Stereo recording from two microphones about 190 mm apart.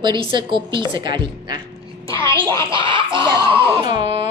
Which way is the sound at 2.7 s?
25° right (ahead or behind).